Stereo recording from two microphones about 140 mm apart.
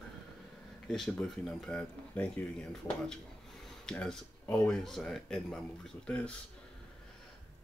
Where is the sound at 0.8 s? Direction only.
5° left (ahead or behind).